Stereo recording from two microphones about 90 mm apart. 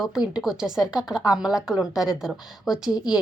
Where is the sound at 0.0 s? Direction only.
5° right (ahead or behind).